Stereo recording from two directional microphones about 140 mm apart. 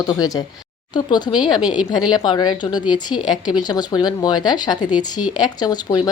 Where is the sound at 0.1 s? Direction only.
25° left (ahead or behind).